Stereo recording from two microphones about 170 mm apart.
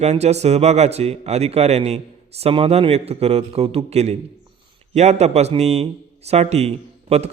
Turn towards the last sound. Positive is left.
turn(degrees=-40)  # may be behind; listen again after turning